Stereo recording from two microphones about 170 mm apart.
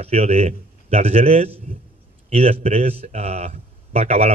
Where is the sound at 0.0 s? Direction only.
35° right (ahead or behind).